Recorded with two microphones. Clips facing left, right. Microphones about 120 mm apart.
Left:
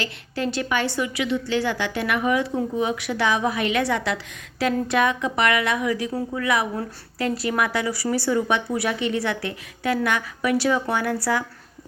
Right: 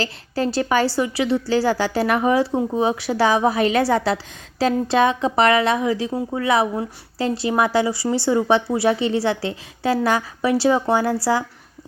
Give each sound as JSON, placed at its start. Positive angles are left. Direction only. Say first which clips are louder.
{"t": 0.0, "sound": "a woman's voice", "louder": "right 4 dB", "side_deg": -35}